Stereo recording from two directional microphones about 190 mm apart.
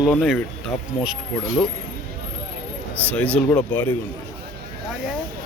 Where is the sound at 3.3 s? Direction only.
5° left (ahead or behind).